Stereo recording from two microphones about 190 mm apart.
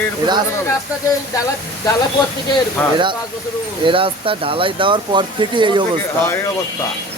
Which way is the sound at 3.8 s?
30° right (ahead or behind).